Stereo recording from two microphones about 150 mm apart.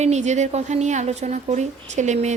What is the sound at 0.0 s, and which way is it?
Speech, 50° right (ahead or behind).